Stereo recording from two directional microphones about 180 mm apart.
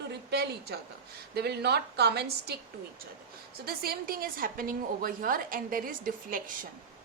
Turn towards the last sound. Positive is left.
turn(degrees=-50)  # may be behind; listen again after turning